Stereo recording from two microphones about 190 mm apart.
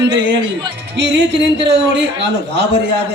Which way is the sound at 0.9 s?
65° right (ahead or behind).